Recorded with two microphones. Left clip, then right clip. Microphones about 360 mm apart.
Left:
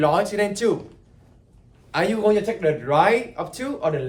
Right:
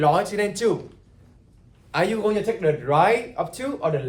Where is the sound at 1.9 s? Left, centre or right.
Centre.